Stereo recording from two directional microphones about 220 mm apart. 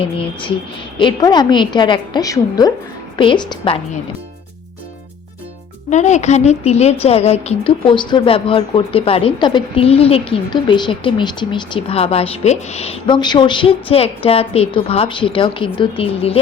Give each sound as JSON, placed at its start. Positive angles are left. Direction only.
{"t": 0.0, "sound": "a woman's voice", "side_deg": 25}
{"t": 5.9, "sound": "a woman's voice", "side_deg": 30}